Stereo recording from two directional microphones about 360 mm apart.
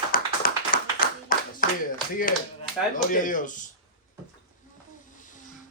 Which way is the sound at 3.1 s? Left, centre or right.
Left.